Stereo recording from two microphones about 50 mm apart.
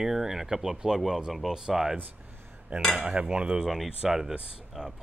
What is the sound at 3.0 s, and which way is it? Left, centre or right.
Cutlery, right.